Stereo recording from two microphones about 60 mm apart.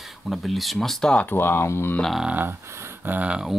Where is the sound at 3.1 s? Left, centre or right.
Right.